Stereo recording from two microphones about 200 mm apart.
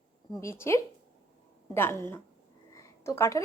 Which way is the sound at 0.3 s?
15° left (ahead or behind).